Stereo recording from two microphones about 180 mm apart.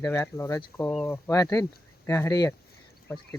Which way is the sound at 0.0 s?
15° left (ahead or behind).